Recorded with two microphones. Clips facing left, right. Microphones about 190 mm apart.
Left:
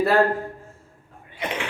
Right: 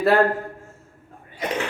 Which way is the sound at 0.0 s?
Centre (ahead or behind).